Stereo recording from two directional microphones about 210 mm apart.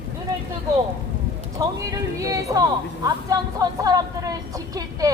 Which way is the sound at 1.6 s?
15° right (ahead or behind).